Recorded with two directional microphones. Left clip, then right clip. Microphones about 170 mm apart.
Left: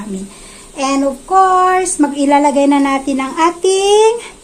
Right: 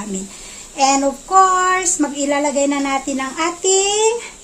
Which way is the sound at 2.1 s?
25° left (ahead or behind).